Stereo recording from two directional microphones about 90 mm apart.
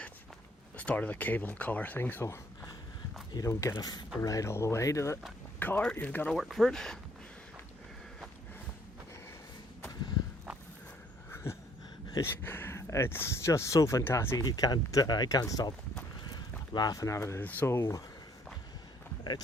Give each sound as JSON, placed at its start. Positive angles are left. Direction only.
{"t": 0.8, "sound": "speech", "side_deg": 15}
{"t": 3.8, "sound": "speech", "side_deg": 45}
{"t": 5.5, "sound": "speech", "side_deg": 20}
{"t": 6.3, "sound": "speech", "side_deg": 0}
{"t": 12.2, "sound": "speech", "side_deg": 25}
{"t": 14.3, "sound": "speech", "side_deg": 40}
{"t": 16.2, "sound": "a sound", "side_deg": 50}
{"t": 17.7, "sound": "speech", "side_deg": 30}